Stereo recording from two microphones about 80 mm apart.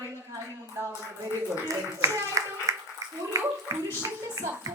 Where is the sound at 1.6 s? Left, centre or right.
Right.